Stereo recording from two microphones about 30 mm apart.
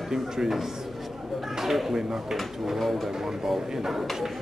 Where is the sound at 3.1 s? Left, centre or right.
Centre.